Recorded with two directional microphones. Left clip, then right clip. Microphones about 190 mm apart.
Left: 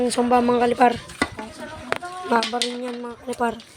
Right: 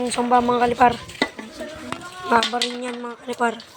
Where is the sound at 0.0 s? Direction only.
25° left (ahead or behind).